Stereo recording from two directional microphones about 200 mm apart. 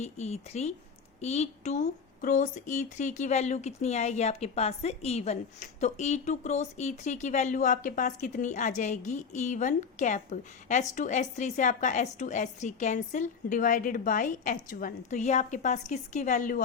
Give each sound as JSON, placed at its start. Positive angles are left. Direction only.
{"t": 0.0, "sound": "speech", "side_deg": 35}